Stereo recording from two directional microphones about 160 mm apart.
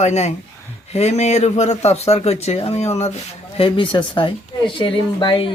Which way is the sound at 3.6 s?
30° left (ahead or behind).